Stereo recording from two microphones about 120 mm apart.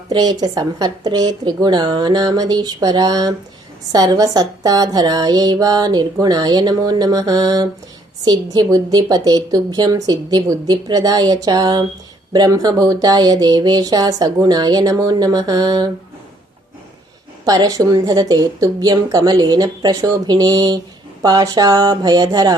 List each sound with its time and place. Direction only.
0.1 s speech: 35° right (ahead or behind)
17.4 s speech: 30° right (ahead or behind)